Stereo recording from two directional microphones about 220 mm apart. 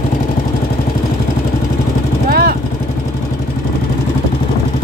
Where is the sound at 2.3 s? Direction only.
45° right (ahead or behind).